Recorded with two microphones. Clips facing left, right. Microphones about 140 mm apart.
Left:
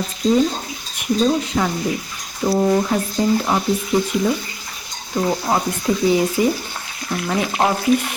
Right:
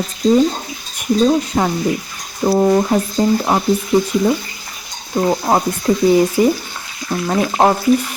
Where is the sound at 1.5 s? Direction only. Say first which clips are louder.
Right 3 dB; 40° right (ahead or behind).